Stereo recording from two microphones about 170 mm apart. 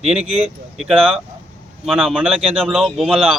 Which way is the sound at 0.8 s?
5° right (ahead or behind).